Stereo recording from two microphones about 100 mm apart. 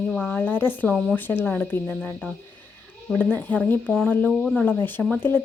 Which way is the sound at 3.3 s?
15° left (ahead or behind).